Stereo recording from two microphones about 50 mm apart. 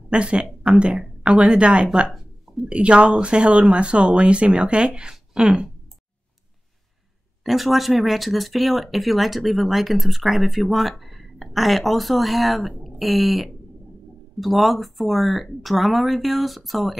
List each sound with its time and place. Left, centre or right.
0.1 s speech: right
7.4 s speech: centre